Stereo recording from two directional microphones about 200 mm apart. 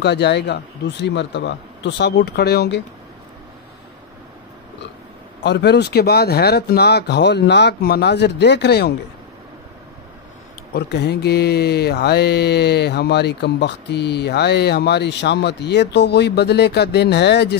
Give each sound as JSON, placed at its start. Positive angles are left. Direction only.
{"t": 0.0, "sound": "mantra", "side_deg": 60}
{"t": 5.4, "sound": "mantra", "side_deg": 55}
{"t": 10.7, "sound": "mantra", "side_deg": 55}